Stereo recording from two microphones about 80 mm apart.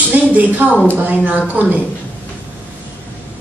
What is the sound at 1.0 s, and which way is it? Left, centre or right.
Speech, centre.